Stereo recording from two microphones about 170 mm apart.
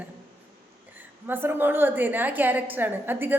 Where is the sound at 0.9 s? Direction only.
10° right (ahead or behind).